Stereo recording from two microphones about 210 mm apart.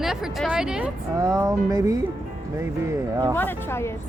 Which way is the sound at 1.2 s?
15° right (ahead or behind).